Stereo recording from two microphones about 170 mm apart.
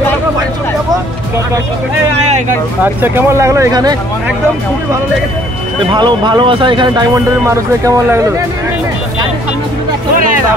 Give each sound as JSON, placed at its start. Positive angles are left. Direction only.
{"t": 2.8, "sound": "speech", "side_deg": -10}
{"t": 5.9, "sound": "speech", "side_deg": -25}
{"t": 7.4, "sound": "speech", "side_deg": -15}